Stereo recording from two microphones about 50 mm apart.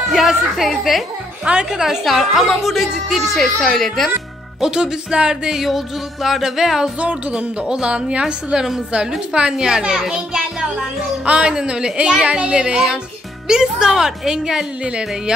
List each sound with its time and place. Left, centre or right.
0.1 s music: centre
1.4 s a woman's voice: right
1.7 s a child's voice: centre
2.0 s music: centre
4.6 s a child's voice: centre
5.7 s music: centre
7.0 s a woman's voice: right
14.8 s a woman's voice: centre